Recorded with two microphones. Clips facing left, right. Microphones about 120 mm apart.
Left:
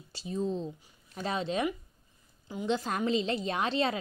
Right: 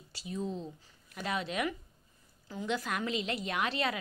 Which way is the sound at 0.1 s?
30° left (ahead or behind).